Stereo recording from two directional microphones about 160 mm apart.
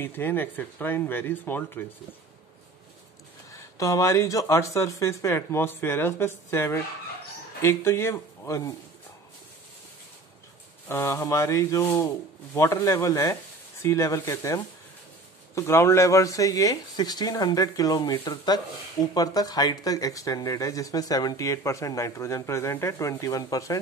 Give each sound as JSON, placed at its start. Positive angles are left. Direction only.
{"t": 0.0, "sound": "speech", "side_deg": 15}
{"t": 3.7, "sound": "speech", "side_deg": 20}
{"t": 10.9, "sound": "speech", "side_deg": 15}